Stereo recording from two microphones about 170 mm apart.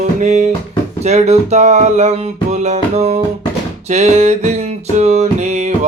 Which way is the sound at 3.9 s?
40° right (ahead or behind).